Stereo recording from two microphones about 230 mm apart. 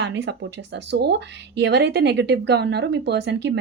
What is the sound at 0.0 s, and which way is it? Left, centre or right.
Speech, right.